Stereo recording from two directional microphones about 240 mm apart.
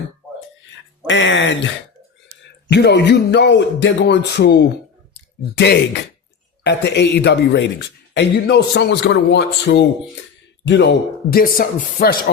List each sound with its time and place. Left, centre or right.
1.0 s speech: left
2.6 s speech: left